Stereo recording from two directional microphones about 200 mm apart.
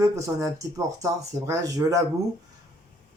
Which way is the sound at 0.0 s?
15° right (ahead or behind).